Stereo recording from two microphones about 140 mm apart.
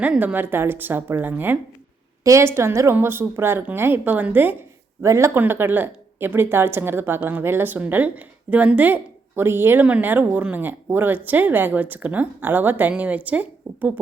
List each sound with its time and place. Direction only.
0.0 s speech: 10° right (ahead or behind)